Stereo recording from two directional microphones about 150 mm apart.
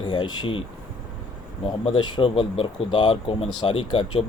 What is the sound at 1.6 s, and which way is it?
Speech, 35° left (ahead or behind).